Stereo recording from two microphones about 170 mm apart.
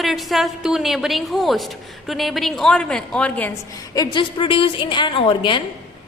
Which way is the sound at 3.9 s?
30° left (ahead or behind).